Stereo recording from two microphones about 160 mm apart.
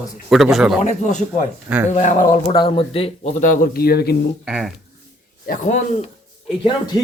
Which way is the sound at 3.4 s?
55° left (ahead or behind).